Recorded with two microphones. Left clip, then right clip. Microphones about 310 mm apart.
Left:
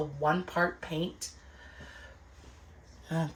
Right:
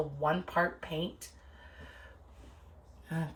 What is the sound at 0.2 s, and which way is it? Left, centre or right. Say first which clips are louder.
Speech: left 2 dB; centre.